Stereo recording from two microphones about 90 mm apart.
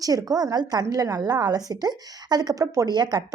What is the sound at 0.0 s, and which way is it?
A woman's voice, 45° right (ahead or behind).